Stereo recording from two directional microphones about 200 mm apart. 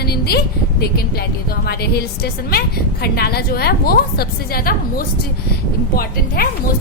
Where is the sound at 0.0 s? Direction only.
50° left (ahead or behind).